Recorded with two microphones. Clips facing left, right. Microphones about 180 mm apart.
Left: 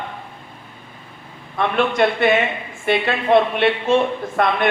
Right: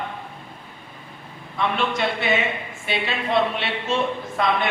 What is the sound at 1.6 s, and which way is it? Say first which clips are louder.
A man's voice: left 6 dB; 55° left (ahead or behind).